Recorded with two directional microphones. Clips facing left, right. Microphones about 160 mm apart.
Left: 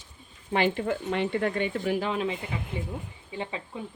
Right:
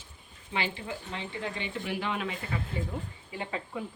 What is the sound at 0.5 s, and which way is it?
Speech, 55° left (ahead or behind).